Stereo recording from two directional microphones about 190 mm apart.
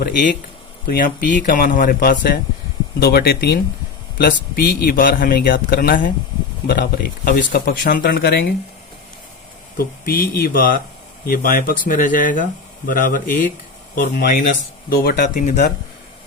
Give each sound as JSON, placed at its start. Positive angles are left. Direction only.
{"t": 0.0, "sound": "speech", "side_deg": 50}
{"t": 9.7, "sound": "speech", "side_deg": 50}